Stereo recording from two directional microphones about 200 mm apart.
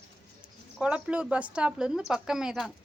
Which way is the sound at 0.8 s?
5° right (ahead or behind).